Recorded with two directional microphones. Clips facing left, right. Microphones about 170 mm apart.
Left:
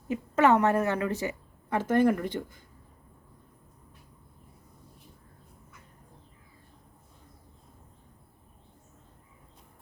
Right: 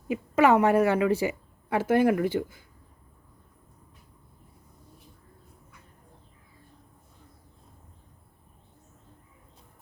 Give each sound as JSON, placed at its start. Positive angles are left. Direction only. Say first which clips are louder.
{"t": 0.1, "sound": "a woman's voice", "louder": "right 2 dB", "side_deg": -10}